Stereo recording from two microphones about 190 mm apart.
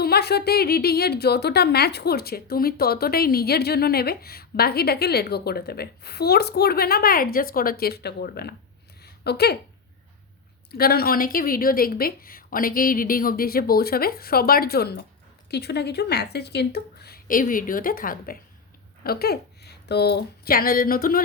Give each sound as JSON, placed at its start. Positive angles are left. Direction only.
{"t": 0.0, "sound": "a woman's voice", "side_deg": 55}
{"t": 10.7, "sound": "a woman's voice", "side_deg": 55}